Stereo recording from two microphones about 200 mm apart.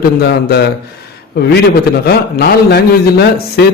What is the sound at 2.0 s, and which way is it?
A man's voice, 55° left (ahead or behind).